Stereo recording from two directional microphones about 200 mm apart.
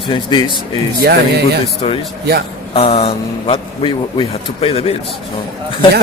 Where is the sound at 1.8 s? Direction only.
25° left (ahead or behind).